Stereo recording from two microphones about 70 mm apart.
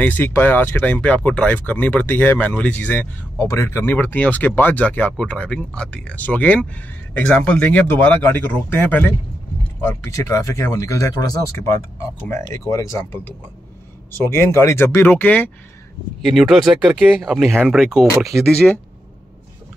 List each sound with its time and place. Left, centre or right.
0.0 s speech: left
3.3 s speech: left
3.9 s speech: left
8.2 s speech: left
14.1 s speech: left
15.0 s speech: left
16.2 s speech: centre